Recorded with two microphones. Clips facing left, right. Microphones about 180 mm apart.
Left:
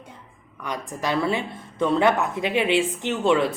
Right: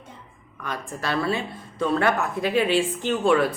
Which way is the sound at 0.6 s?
15° left (ahead or behind).